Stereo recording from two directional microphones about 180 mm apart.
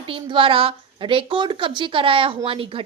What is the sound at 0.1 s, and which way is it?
A woman's voice, 30° right (ahead or behind).